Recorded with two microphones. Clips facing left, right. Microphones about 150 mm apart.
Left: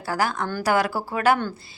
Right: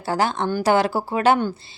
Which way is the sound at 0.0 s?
25° right (ahead or behind).